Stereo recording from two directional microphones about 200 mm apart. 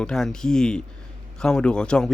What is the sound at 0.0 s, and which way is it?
Speech, 5° left (ahead or behind).